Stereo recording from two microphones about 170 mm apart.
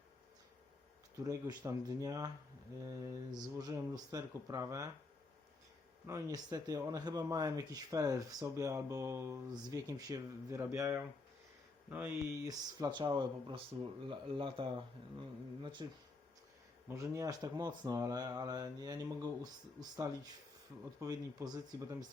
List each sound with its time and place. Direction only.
1.2 s speech: 20° right (ahead or behind)
6.1 s speech: 20° right (ahead or behind)
12.5 s speech: 25° right (ahead or behind)
16.9 s speech: 20° right (ahead or behind)